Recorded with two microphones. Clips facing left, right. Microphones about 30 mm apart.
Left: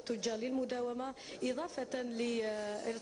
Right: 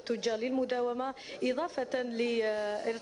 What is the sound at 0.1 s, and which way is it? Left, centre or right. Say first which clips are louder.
A woman's voice: right 5 dB; right.